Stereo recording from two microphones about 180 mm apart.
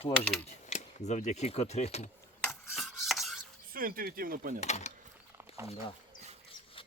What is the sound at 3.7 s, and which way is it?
Speech, 55° right (ahead or behind).